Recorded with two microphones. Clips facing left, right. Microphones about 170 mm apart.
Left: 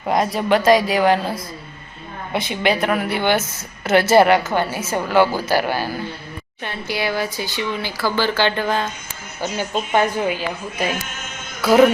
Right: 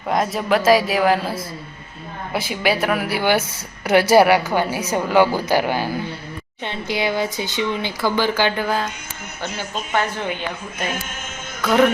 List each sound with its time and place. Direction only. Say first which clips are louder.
0.1 s a woman's voice: left 1 dB; centre (ahead or behind)
9.4 s a man's voice: left 5 dB; 15° left (ahead or behind)
11.6 s music: left 3 dB; 5° left (ahead or behind)